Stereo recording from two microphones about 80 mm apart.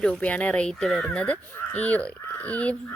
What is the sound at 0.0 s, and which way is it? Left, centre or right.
A woman's voice, centre.